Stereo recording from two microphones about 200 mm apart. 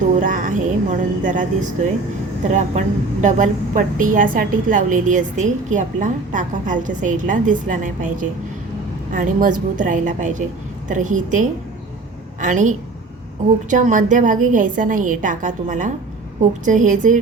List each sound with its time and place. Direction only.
0.2 s a woman's voice: 40° right (ahead or behind)
2.5 s a woman's voice: 35° right (ahead or behind)